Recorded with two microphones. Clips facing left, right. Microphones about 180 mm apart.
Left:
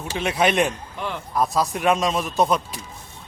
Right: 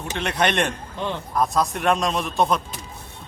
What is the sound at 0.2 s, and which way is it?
Speech, 5° left (ahead or behind).